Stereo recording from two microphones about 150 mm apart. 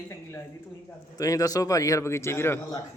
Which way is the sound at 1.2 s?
25° left (ahead or behind).